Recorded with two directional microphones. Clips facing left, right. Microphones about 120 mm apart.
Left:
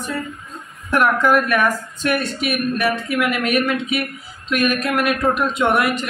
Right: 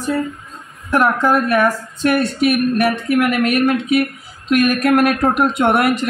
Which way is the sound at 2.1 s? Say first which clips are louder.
Right 6 dB; 45° right (ahead or behind).